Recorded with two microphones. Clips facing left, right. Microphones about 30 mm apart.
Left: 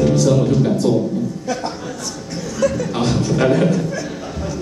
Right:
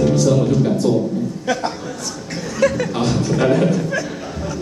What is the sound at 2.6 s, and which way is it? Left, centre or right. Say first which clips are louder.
Speech: right 2 dB; right.